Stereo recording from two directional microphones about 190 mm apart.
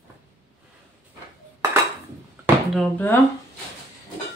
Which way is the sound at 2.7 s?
5° left (ahead or behind).